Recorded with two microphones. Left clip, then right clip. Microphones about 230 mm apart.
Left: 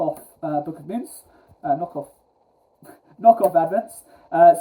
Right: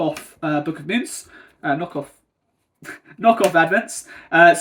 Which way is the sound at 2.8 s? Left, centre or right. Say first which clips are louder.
Left 2 dB; right.